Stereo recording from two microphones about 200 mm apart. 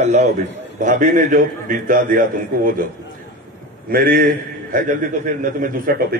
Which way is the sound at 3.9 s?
45° right (ahead or behind).